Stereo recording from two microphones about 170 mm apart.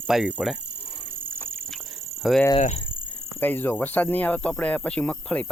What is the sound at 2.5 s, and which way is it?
Speech, 35° left (ahead or behind).